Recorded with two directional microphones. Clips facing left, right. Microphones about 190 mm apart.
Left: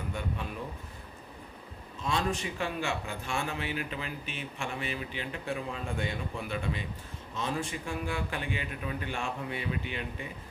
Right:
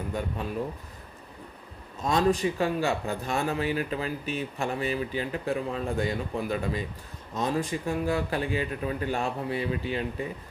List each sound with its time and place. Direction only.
2.0 s a man's voice: 40° right (ahead or behind)